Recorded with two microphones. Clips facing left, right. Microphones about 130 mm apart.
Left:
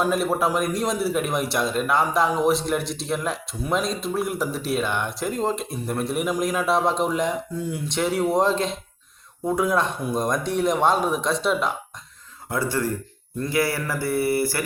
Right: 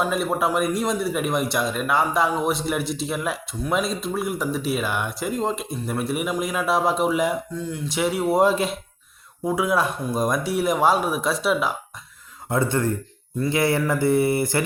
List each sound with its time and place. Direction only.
0.1 s a man's voice: centre (ahead or behind)
7.5 s speech: 10° left (ahead or behind)
7.9 s a man's voice: 5° right (ahead or behind)
12.5 s speech: 20° right (ahead or behind)